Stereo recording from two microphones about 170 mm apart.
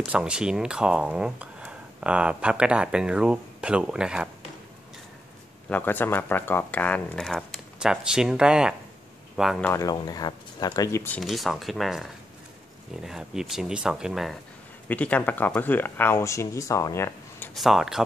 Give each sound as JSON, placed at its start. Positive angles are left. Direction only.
{"t": 0.0, "sound": "speech", "side_deg": -5}
{"t": 5.7, "sound": "speech", "side_deg": 10}
{"t": 9.6, "sound": "speech", "side_deg": 15}
{"t": 11.1, "sound": "speech", "side_deg": 0}
{"t": 14.9, "sound": "speech", "side_deg": 10}
{"t": 17.6, "sound": "speech", "side_deg": 0}